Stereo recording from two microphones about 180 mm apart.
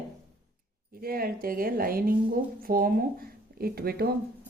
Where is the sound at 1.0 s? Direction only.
55° right (ahead or behind).